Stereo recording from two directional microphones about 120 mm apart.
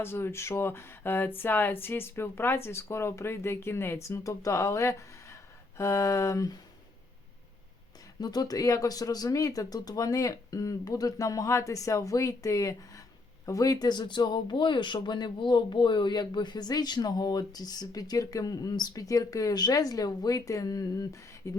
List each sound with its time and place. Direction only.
0.0 s speech: 20° left (ahead or behind)
8.2 s speech: 35° left (ahead or behind)